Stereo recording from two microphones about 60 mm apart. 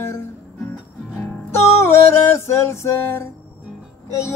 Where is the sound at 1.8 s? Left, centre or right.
Left.